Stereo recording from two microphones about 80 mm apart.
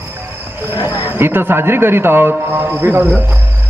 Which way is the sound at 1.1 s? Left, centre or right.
Right.